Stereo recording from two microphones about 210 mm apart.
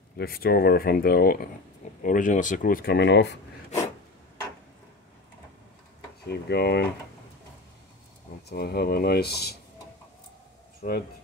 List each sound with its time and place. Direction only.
0.2 s speech: 45° left (ahead or behind)
6.2 s speech: 50° left (ahead or behind)
8.5 s speech: 50° left (ahead or behind)
10.8 s speech: 35° left (ahead or behind)